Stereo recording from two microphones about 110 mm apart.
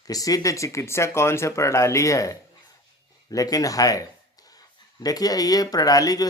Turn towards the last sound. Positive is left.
turn(degrees=35)  # may be behind; listen again after turning